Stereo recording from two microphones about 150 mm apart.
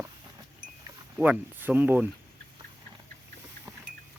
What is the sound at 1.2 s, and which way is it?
Speech, 10° right (ahead or behind).